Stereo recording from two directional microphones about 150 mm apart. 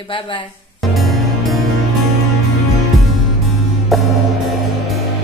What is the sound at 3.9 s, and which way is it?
Music, centre (ahead or behind).